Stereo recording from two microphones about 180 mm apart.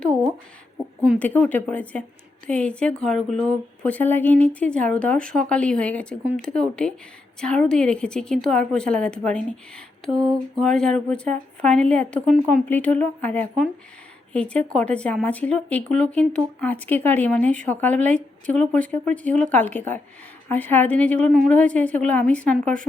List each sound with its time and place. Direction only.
1.2 s a woman's voice: 10° left (ahead or behind)
10.2 s a sound: 20° right (ahead or behind)
10.6 s a woman's voice: 5° left (ahead or behind)